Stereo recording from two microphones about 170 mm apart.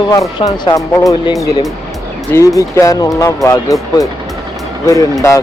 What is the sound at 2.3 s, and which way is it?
Speech, 15° left (ahead or behind).